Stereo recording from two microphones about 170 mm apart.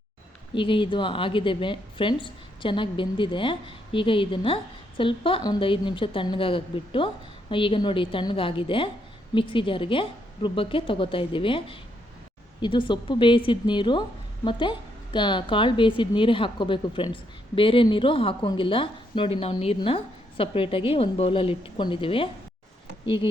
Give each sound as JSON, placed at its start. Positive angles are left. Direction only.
{"t": 0.5, "sound": "a woman's voice", "side_deg": 30}